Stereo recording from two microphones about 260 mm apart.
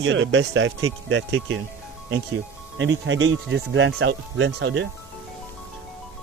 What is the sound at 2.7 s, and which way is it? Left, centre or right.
Speech, right.